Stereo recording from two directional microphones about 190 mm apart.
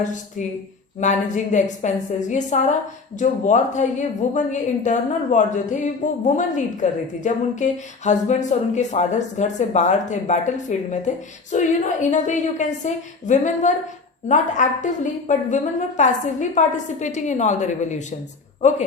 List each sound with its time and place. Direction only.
0.9 s a woman's voice: 40° left (ahead or behind)